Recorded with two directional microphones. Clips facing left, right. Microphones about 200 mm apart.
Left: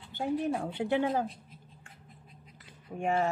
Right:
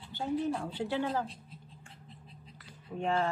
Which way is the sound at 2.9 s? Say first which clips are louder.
Left 2 dB; 10° left (ahead or behind).